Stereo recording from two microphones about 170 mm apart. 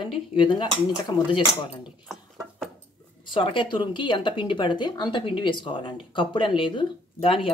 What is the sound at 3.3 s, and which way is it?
Speech, 30° left (ahead or behind).